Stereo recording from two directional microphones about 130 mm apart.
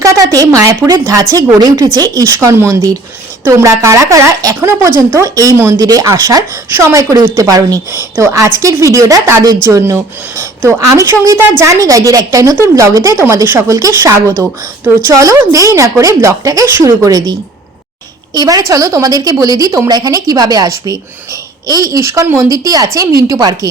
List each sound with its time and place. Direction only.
0.0 s a woman's voice: 25° right (ahead or behind)
18.3 s a woman's voice: 30° right (ahead or behind)